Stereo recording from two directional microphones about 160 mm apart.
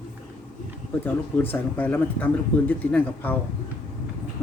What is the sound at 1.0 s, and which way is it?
Speech, 10° left (ahead or behind).